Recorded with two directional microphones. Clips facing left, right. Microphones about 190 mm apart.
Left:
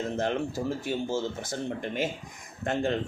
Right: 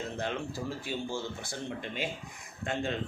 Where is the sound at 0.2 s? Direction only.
45° left (ahead or behind).